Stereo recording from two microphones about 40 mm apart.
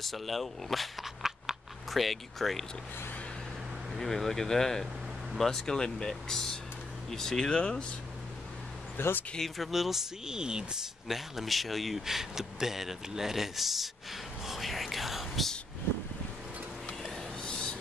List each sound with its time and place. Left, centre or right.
0.0 s speech: centre
1.0 s a sound: centre
3.9 s speech: centre; by 7.8 s left
8.9 s a sound: left
9.4 s speech: centre
10.3 s speech: centre
11.1 s speech: centre
14.4 s whispering: centre
17.4 s a sound: centre